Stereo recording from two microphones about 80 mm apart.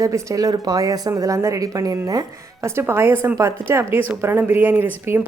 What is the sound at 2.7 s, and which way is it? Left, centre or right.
A woman's voice, right.